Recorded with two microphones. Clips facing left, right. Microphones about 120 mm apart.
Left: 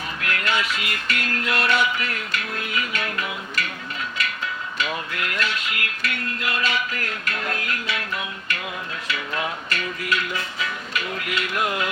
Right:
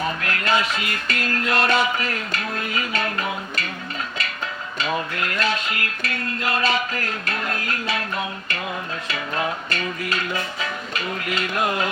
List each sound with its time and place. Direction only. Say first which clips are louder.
0.2 s dishes: right 3 dB; 35° right (ahead or behind)
4.8 s dishes: right 4 dB; 35° right (ahead or behind)